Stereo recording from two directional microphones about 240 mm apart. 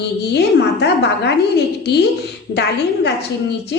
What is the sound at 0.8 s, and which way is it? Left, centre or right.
A woman's voice, left.